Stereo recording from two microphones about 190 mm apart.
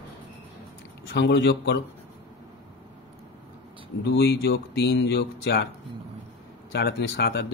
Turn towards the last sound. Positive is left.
turn(degrees=60)  # may be behind; listen again after turning